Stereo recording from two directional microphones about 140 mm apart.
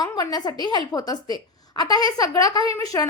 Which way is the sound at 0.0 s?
25° left (ahead or behind).